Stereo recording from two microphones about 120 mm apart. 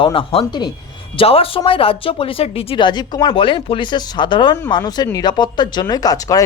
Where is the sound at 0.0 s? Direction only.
45° left (ahead or behind).